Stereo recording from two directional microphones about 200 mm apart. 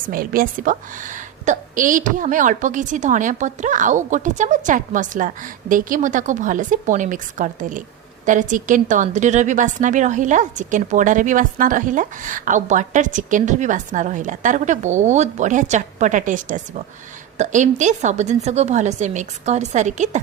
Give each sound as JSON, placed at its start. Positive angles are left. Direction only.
{"t": 0.1, "sound": "a woman's voice", "side_deg": -45}